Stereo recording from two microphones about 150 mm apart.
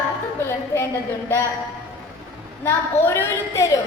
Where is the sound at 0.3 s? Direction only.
15° left (ahead or behind).